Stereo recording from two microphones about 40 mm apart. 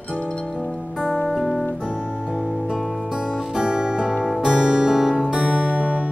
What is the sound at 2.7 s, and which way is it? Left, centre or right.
Music, centre.